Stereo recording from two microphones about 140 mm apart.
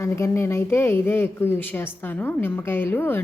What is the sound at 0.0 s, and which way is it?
A woman's voice, 20° left (ahead or behind).